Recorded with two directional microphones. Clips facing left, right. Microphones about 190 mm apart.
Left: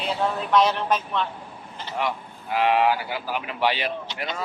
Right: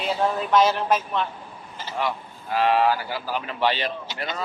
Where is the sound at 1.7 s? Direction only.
5° right (ahead or behind).